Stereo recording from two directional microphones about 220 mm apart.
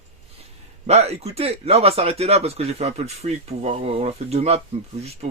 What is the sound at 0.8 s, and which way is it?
Speech, 30° right (ahead or behind).